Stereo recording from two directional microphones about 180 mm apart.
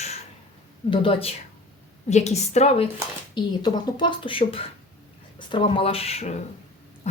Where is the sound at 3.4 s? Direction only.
25° left (ahead or behind).